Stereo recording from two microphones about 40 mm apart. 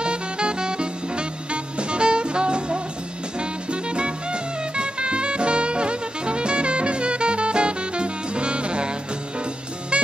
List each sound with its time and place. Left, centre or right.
0.0 s music: right